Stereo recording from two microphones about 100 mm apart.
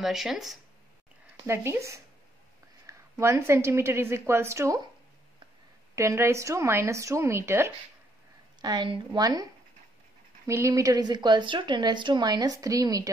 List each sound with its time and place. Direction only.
0.0 s speech: 5° right (ahead or behind)
1.4 s a woman's voice: 25° right (ahead or behind)
5.9 s a woman's voice: 30° right (ahead or behind)
8.5 s a woman's voice: 45° right (ahead or behind)